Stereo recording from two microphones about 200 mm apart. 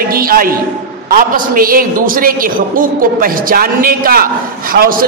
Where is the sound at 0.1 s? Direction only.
45° right (ahead or behind).